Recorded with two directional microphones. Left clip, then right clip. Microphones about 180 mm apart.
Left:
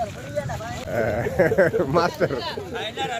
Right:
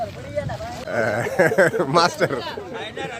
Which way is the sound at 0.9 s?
15° right (ahead or behind).